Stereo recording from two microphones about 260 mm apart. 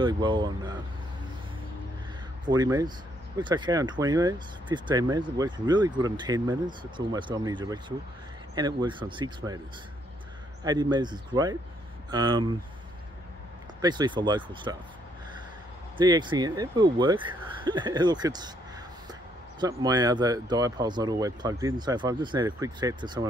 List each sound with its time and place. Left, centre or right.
0.0 s speech: centre
2.4 s speech: centre
10.6 s speech: centre
13.7 s speech: centre
16.0 s speech: centre
19.6 s speech: centre